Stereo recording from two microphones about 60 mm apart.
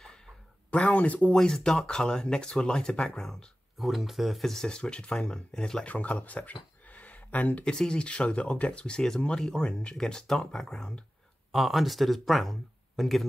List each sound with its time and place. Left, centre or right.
0.7 s speech: left
1.3 s speech: centre
5.9 s speech: left
7.6 s speech: centre